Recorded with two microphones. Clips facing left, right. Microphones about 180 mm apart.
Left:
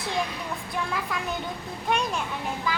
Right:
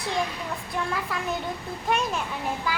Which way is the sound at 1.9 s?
Centre (ahead or behind).